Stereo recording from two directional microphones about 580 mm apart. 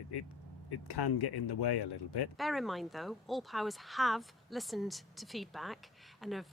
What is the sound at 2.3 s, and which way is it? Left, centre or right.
Speech, centre.